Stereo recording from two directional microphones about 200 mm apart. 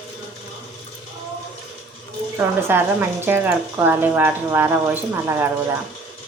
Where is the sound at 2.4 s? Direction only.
10° right (ahead or behind).